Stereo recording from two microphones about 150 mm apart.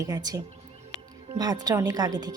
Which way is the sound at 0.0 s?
25° right (ahead or behind).